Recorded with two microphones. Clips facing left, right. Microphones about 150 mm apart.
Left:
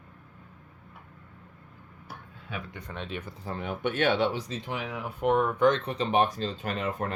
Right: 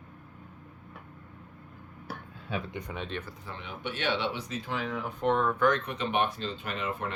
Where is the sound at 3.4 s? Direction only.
45° left (ahead or behind).